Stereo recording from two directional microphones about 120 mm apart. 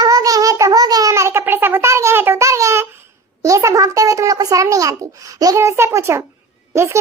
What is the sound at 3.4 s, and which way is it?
A child's voice, 25° right (ahead or behind).